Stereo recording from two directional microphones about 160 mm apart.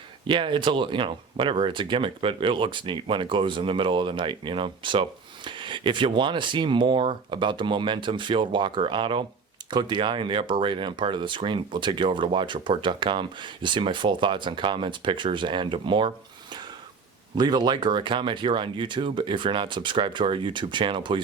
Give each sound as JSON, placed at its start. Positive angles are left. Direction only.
{"t": 0.3, "sound": "speech", "side_deg": -30}